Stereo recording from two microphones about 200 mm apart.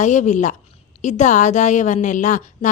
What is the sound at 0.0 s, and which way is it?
A woman's voice, 35° left (ahead or behind).